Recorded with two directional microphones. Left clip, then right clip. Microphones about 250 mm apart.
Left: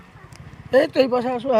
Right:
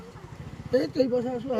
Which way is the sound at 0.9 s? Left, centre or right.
Left.